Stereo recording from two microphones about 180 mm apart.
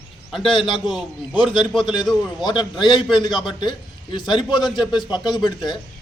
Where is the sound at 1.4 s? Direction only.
30° left (ahead or behind).